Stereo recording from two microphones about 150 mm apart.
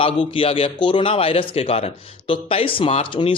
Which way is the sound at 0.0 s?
35° left (ahead or behind).